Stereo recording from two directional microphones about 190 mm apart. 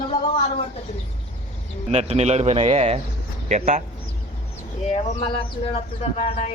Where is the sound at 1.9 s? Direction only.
35° right (ahead or behind).